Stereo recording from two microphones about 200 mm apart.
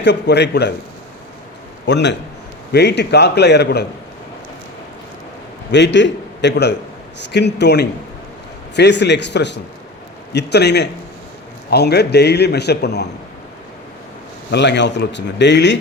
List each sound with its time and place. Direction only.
0.0 s a man's voice: 60° left (ahead or behind)
1.9 s a man's voice: 60° left (ahead or behind)
5.7 s a man's voice: 60° left (ahead or behind)
14.5 s a man's voice: 60° left (ahead or behind)